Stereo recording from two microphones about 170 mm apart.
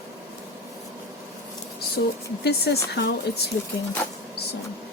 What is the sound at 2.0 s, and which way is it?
Speech, 85° left.